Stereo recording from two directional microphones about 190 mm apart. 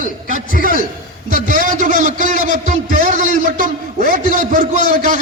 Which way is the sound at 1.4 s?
45° right (ahead or behind).